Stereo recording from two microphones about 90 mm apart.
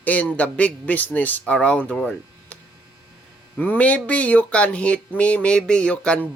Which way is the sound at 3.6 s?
15° left (ahead or behind).